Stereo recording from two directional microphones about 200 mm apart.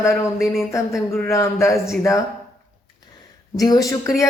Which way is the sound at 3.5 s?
20° left (ahead or behind).